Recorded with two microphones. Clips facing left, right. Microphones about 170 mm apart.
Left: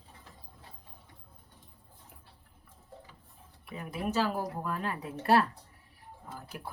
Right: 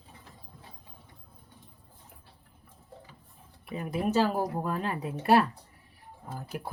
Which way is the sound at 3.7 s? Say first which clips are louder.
Right 5 dB; 20° right (ahead or behind).